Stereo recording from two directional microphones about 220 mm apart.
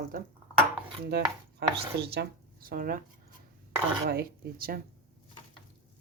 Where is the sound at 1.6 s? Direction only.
50° right (ahead or behind).